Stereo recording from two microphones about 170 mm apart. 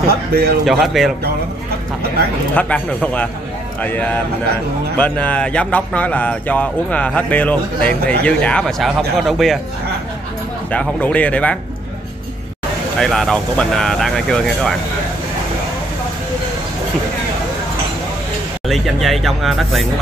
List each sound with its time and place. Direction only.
0.0 s speech: 65° right (ahead or behind)
0.7 s speech: centre (ahead or behind)
2.5 s speech: 10° left (ahead or behind)
10.7 s speech: 10° left (ahead or behind)
13.0 s speech: centre (ahead or behind)
18.7 s speech: centre (ahead or behind)